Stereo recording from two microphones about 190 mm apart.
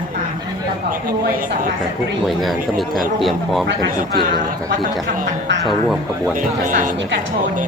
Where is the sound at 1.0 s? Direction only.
45° right (ahead or behind).